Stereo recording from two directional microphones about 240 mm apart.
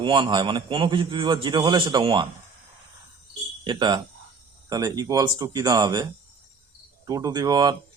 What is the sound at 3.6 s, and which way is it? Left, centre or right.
A man's voice, centre.